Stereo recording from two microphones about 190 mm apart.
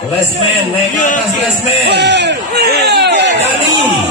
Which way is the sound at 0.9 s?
45° left (ahead or behind).